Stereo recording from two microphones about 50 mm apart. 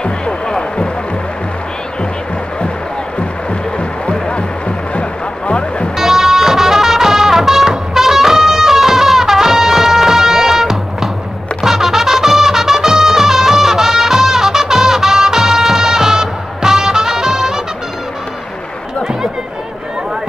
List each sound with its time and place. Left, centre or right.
0.0 s music: centre
3.7 s music: left
5.5 s music: left
5.9 s music: centre